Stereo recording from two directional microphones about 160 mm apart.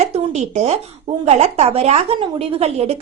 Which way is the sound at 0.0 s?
40° right (ahead or behind).